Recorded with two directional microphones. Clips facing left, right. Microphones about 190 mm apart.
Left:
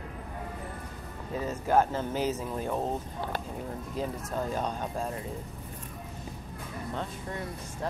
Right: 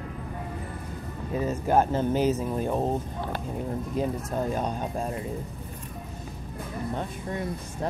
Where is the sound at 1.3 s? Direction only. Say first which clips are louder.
Right 2 dB; 15° right (ahead or behind).